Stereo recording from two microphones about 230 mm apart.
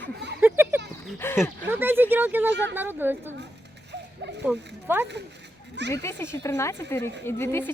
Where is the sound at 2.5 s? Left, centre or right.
Right.